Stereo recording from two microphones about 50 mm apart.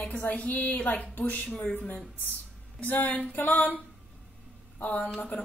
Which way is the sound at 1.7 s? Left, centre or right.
Left.